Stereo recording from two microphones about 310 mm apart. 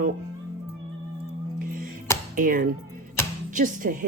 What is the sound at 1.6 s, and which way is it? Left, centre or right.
Music, right.